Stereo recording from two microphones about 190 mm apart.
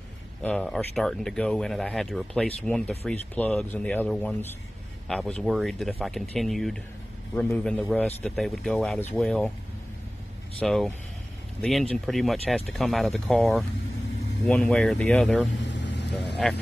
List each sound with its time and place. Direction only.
0.4 s a man's voice: 5° left (ahead or behind)
10.6 s speech: 5° left (ahead or behind)
15.6 s vehicle: 65° left (ahead or behind)